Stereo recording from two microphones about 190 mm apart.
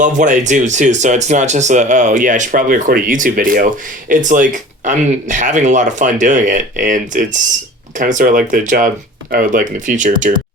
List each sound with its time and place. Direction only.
0.0 s speech: 40° right (ahead or behind)